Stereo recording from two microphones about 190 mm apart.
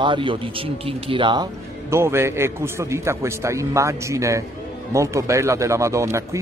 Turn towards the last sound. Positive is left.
turn(degrees=-15)  # may be behind; listen again after turning